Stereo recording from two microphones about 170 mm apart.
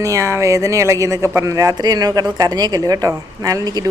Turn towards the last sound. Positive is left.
turn(degrees=-20)  # may be behind; listen again after turning